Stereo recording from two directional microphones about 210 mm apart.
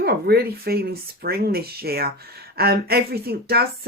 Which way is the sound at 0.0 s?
50° right (ahead or behind).